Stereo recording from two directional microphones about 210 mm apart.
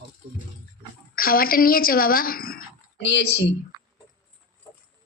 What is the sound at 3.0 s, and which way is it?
Speech, 55° left (ahead or behind).